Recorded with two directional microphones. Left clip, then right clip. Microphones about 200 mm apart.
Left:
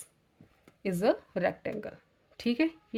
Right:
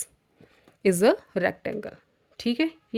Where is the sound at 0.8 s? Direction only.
45° right (ahead or behind).